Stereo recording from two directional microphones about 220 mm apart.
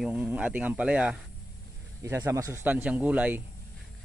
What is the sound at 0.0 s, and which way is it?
Speech, 5° right (ahead or behind).